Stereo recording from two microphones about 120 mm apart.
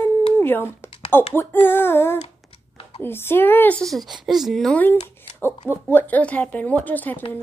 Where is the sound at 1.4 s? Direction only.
20° left (ahead or behind).